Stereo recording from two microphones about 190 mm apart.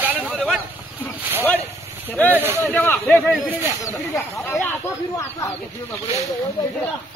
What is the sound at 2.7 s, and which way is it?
Speech, 10° left (ahead or behind).